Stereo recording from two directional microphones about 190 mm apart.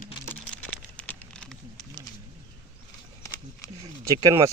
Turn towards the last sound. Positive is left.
turn(degrees=-15)  # may be behind; listen again after turning